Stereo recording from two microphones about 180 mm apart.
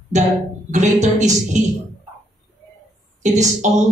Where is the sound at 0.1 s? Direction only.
40° right (ahead or behind).